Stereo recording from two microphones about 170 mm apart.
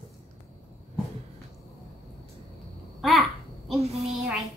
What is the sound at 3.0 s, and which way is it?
Babbling, centre (ahead or behind).